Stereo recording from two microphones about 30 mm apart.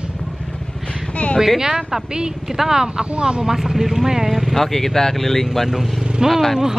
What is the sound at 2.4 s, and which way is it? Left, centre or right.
Speech, centre.